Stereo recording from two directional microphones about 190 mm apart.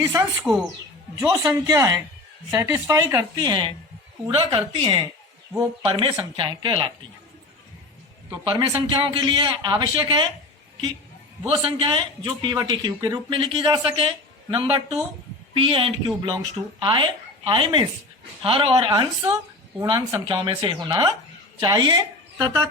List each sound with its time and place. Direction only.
0.0 s a woman's voice: 15° right (ahead or behind)
0.4 s a woman's voice: centre (ahead or behind)
1.3 s a woman's voice: 15° right (ahead or behind)
8.3 s a man's voice: 25° right (ahead or behind)
11.4 s a man's voice: 30° right (ahead or behind)